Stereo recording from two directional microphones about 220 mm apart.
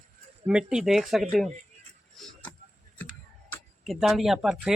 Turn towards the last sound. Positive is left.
turn(degrees=-5)  # may be behind; listen again after turning